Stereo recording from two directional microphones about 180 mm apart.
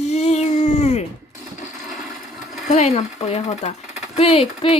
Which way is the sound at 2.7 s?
40° left (ahead or behind).